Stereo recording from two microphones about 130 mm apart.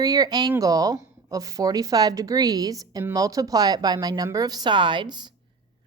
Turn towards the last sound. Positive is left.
turn(degrees=-35)  # may be behind; listen again after turning